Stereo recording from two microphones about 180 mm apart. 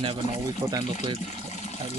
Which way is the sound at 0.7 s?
30° right (ahead or behind).